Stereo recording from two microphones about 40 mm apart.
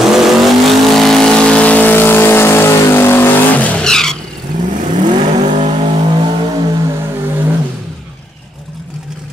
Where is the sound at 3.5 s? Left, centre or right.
Left.